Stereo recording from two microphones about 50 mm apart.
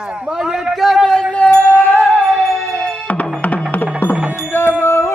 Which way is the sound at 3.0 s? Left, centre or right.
Left.